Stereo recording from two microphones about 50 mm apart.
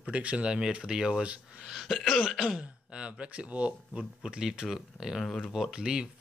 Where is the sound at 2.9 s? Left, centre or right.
Right.